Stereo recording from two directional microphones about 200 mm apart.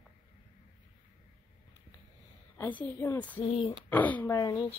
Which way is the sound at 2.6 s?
10° left (ahead or behind).